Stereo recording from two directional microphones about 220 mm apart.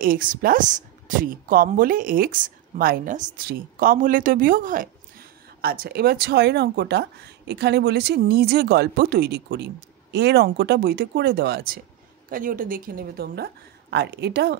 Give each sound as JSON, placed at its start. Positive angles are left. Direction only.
{"t": 0.0, "sound": "speech", "side_deg": -40}